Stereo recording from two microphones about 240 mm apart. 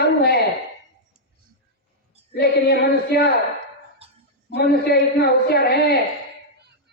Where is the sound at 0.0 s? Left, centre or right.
Left.